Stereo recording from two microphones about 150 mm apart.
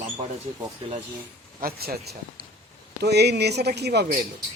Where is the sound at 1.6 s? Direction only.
90° right.